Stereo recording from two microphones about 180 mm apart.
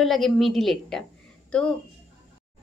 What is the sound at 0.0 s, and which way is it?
A woman's voice, centre (ahead or behind).